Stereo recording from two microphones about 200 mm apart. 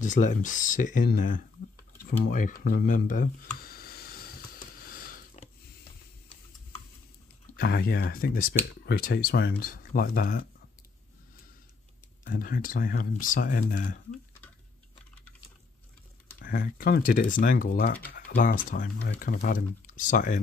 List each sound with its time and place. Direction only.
0.0 s speech: 40° left (ahead or behind)
2.0 s a sound: 45° left (ahead or behind)
7.5 s speech: 50° left (ahead or behind)
12.4 s speech: 45° left (ahead or behind)
16.3 s speech: 45° left (ahead or behind)